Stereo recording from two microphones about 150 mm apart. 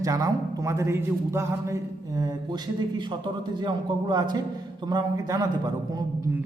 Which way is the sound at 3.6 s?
25° right (ahead or behind).